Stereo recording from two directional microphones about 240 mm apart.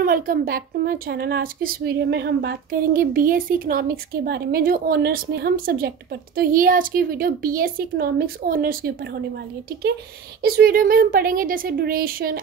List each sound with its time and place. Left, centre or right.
0.0 s speech: right
10.4 s speech: right